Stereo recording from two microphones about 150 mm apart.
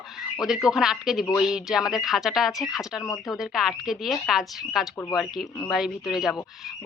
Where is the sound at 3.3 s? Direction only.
5° right (ahead or behind).